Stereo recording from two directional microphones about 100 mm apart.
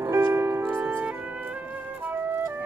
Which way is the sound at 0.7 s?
15° right (ahead or behind).